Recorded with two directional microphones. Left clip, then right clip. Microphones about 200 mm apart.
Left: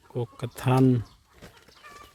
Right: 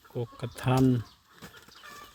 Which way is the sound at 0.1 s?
15° left (ahead or behind).